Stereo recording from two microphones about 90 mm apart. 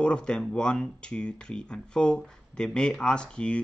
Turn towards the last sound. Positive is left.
turn(degrees=10)  # may be behind; listen again after turning